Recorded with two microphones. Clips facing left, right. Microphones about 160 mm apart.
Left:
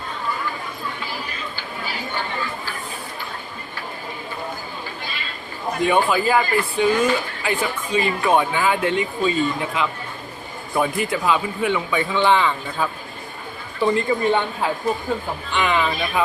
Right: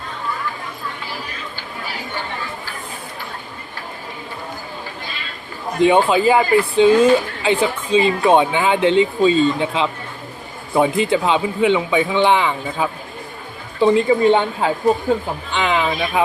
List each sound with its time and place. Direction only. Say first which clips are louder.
5.8 s speech: right 5 dB; 20° right (ahead or behind)